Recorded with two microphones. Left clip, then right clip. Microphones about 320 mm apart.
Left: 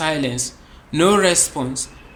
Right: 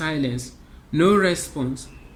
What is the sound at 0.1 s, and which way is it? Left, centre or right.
Speech, left.